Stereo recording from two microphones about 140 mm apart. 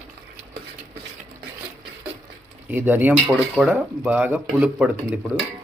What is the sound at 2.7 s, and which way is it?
Speech, 15° right (ahead or behind).